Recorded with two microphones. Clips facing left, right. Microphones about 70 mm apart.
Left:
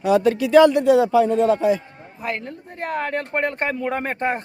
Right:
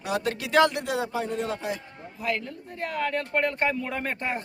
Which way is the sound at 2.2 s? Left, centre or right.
Left.